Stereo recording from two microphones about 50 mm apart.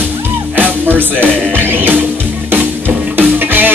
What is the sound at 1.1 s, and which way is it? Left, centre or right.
Music, left.